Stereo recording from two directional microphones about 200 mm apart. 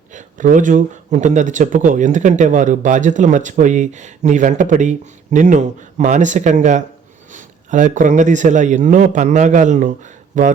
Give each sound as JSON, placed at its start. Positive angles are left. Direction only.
{"t": 0.1, "sound": "a man's voice", "side_deg": -40}